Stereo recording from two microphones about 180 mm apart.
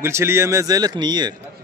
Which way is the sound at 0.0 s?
15° right (ahead or behind).